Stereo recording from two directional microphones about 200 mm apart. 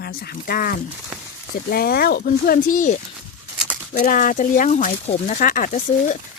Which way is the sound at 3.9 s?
40° left (ahead or behind).